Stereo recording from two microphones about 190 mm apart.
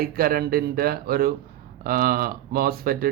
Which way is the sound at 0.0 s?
50° right (ahead or behind).